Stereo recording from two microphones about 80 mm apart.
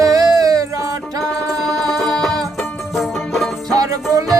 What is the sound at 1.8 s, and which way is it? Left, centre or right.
Music, centre.